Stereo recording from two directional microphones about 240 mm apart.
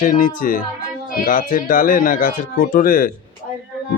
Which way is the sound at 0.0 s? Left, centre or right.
Left.